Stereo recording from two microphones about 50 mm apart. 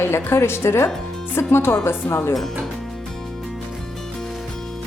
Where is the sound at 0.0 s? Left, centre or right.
Left.